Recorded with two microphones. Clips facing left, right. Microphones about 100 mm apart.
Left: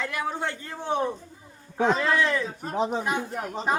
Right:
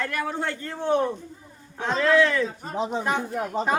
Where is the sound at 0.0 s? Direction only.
15° left (ahead or behind).